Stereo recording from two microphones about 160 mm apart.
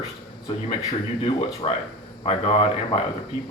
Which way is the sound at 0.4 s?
35° left (ahead or behind).